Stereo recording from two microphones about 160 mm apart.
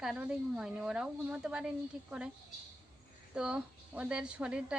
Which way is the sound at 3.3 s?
5° right (ahead or behind).